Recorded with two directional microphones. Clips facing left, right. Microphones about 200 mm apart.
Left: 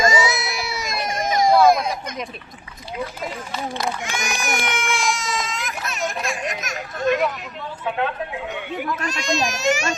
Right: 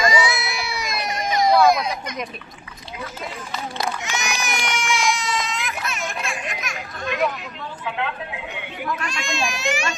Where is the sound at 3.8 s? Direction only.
50° left (ahead or behind).